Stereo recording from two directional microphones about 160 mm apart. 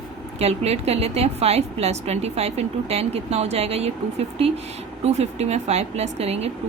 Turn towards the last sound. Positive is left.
turn(degrees=-40)  # may be behind; listen again after turning